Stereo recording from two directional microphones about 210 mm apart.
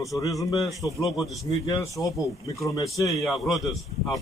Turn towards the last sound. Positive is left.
turn(degrees=0)  # may be behind; listen again after turning